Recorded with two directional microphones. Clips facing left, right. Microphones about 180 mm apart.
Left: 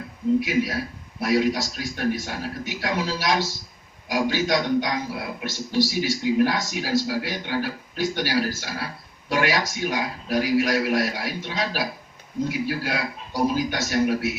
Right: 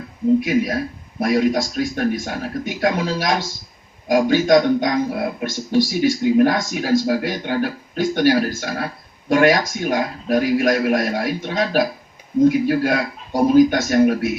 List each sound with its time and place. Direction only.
0.3 s a man's voice: 50° right (ahead or behind)